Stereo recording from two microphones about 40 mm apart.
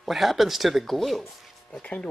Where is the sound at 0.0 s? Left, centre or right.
Centre.